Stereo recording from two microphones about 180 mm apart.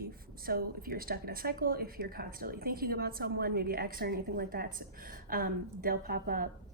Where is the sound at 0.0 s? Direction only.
55° right (ahead or behind).